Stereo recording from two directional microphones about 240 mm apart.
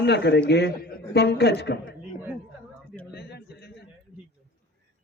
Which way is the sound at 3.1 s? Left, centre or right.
Left.